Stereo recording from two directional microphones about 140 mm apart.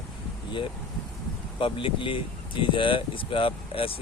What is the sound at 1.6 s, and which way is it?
Speech, 40° left (ahead or behind).